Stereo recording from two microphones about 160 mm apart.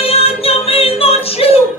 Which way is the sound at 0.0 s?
40° left (ahead or behind).